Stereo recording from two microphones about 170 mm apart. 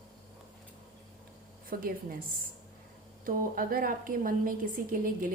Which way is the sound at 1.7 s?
60° right (ahead or behind).